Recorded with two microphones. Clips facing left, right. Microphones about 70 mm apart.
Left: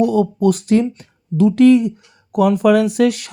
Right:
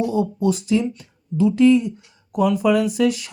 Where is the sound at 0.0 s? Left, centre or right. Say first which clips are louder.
Left 6 dB; left.